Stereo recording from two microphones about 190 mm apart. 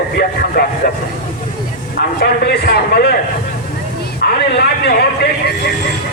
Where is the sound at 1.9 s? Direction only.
60° left (ahead or behind).